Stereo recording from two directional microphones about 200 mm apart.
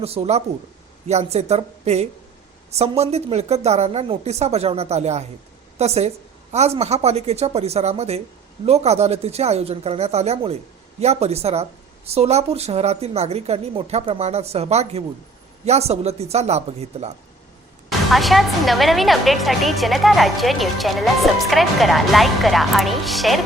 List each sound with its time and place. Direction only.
0.0 s a woman's voice: 30° right (ahead or behind)
18.1 s a woman's voice: centre (ahead or behind)